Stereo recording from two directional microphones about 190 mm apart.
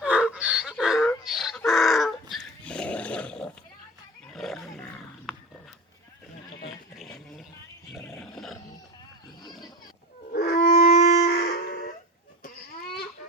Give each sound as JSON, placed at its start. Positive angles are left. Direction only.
{"t": 0.0, "sound": "chicken", "side_deg": -5}
{"t": 2.3, "sound": "dog", "side_deg": 5}
{"t": 4.3, "sound": "roaring cats", "side_deg": 0}
{"t": 6.7, "sound": "a sound", "side_deg": 0}
{"t": 8.0, "sound": "roar", "side_deg": 0}
{"t": 10.3, "sound": "wind instrument", "side_deg": 55}
{"t": 10.7, "sound": "wind instrument", "side_deg": 40}
{"t": 11.1, "sound": "a sound", "side_deg": 60}